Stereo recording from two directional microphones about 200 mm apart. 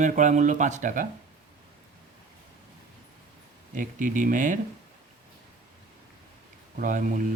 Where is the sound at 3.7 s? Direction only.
40° right (ahead or behind).